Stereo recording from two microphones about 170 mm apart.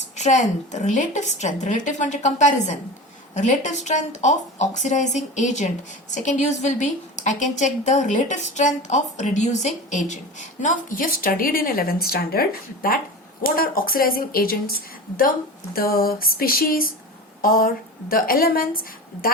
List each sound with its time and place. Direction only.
0.2 s a woman's voice: 45° left (ahead or behind)
15.7 s speech: 60° left (ahead or behind)
18.1 s speech: 60° left (ahead or behind)